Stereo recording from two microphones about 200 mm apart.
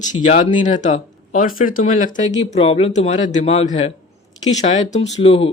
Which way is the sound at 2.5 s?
30° left (ahead or behind).